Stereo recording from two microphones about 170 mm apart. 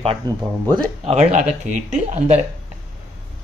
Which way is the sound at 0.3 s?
25° right (ahead or behind).